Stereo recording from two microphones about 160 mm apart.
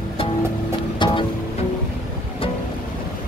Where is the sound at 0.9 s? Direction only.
30° left (ahead or behind).